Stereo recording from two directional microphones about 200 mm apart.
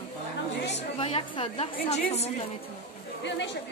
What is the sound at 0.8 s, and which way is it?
A woman's voice, 30° left (ahead or behind).